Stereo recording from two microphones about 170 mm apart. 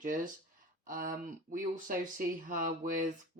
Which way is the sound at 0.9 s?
50° right (ahead or behind).